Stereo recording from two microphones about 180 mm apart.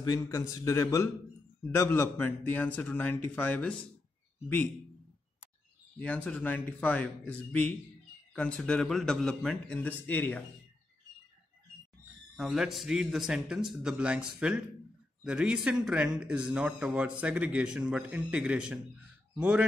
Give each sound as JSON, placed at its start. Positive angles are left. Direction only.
{"t": 0.0, "sound": "speech", "side_deg": 20}
{"t": 5.9, "sound": "speech", "side_deg": 10}
{"t": 12.4, "sound": "speech", "side_deg": 0}